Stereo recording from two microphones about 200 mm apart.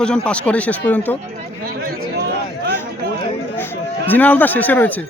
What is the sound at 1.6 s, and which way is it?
Chatter, 45° right (ahead or behind).